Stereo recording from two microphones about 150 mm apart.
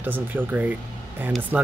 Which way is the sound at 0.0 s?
10° right (ahead or behind).